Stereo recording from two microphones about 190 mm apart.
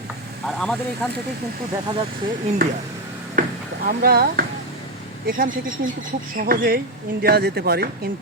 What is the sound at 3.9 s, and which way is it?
A woman's voice, 55° right (ahead or behind).